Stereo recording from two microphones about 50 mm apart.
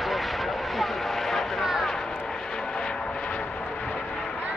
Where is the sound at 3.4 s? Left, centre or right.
Left.